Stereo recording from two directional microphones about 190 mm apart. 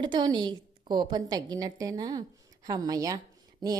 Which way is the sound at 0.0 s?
25° right (ahead or behind).